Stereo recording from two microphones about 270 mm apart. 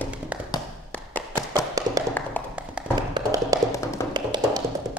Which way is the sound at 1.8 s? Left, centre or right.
Centre.